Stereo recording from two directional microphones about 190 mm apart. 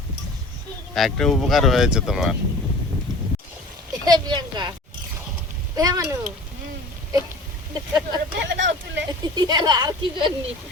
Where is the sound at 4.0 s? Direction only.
20° right (ahead or behind).